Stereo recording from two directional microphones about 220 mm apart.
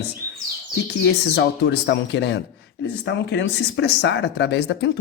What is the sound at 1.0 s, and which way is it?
Speech, 50° left (ahead or behind).